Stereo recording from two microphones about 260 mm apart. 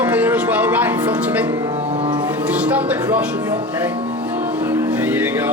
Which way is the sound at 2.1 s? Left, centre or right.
Centre.